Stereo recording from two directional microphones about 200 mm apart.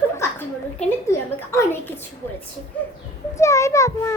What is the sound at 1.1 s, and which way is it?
Speech, 10° left (ahead or behind).